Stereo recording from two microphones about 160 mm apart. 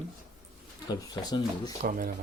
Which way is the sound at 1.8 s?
60° right (ahead or behind).